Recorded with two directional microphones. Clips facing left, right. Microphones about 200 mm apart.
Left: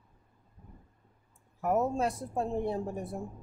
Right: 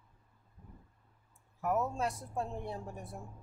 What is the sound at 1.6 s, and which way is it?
Speech, 30° left (ahead or behind).